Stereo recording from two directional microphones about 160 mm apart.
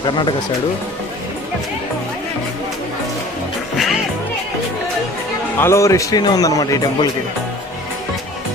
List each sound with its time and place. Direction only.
0.0 s a man's voice: 30° left (ahead or behind)
5.5 s a man's voice: 15° left (ahead or behind)